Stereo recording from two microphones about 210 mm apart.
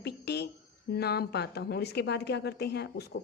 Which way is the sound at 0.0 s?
50° left (ahead or behind).